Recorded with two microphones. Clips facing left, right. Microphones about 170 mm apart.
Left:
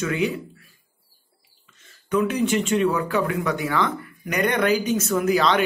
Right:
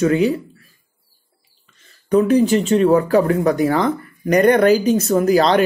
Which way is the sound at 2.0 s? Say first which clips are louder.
Right 8 dB; 35° right (ahead or behind).